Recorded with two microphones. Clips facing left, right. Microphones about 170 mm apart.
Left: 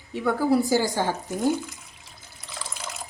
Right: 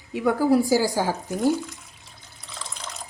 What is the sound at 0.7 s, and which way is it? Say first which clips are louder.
Water: right 2 dB; 5° right (ahead or behind).